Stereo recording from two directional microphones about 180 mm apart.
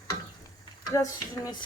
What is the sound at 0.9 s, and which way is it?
Speech, 20° left (ahead or behind).